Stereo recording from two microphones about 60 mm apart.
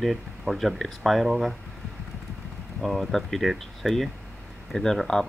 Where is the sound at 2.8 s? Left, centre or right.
Centre.